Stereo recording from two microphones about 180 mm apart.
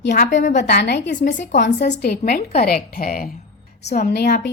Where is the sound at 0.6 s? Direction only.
70° left (ahead or behind).